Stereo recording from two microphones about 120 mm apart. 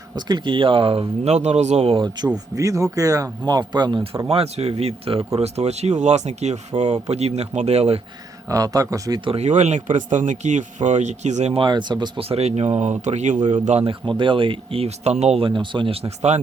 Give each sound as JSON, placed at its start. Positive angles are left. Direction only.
{"t": 0.2, "sound": "speech", "side_deg": -40}
{"t": 2.2, "sound": "speech", "side_deg": -35}
{"t": 4.3, "sound": "speech", "side_deg": -60}
{"t": 8.4, "sound": "speech", "side_deg": -30}
{"t": 9.4, "sound": "speech", "side_deg": -70}
{"t": 11.6, "sound": "speech", "side_deg": -40}
{"t": 12.3, "sound": "speech", "side_deg": -60}
{"t": 13.7, "sound": "speech", "side_deg": -60}
{"t": 14.2, "sound": "speech", "side_deg": -45}
{"t": 15.4, "sound": "speech", "side_deg": -45}